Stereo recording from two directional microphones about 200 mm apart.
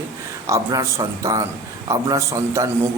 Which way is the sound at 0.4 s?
15° right (ahead or behind).